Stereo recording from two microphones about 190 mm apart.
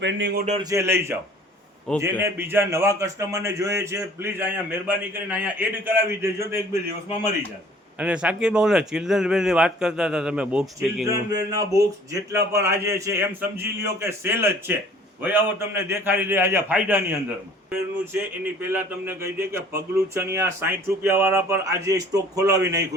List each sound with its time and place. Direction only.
0.0 s speech: 70° right (ahead or behind)
0.6 s speech: 15° right (ahead or behind)
7.9 s a man's voice: 5° right (ahead or behind)
11.0 s speech: 15° right (ahead or behind)